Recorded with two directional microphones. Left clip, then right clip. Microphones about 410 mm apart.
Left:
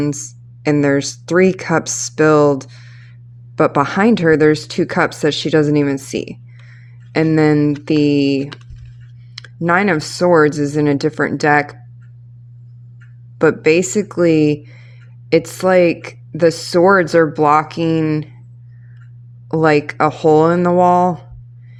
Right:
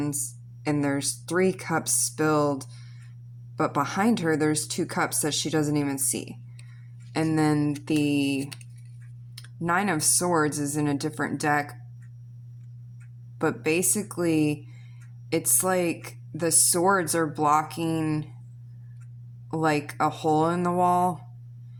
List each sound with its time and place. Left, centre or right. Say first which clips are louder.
0.0 s speech: left 10 dB; right
13.4 s speech: left 13 dB; right
19.5 s speech: left 12 dB; right